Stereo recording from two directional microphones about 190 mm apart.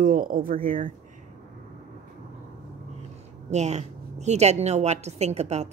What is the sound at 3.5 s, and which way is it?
A woman's voice, 35° right (ahead or behind).